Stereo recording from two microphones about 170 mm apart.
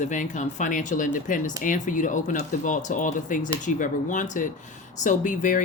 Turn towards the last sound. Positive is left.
turn(degrees=50)  # may be behind; listen again after turning